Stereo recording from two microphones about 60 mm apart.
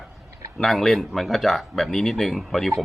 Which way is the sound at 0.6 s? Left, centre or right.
Centre.